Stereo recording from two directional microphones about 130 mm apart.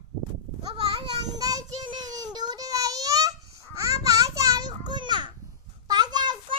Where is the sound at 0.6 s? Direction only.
30° right (ahead or behind).